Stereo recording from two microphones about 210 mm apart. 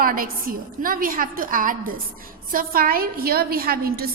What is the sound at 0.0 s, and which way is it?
A woman's voice, 45° right (ahead or behind).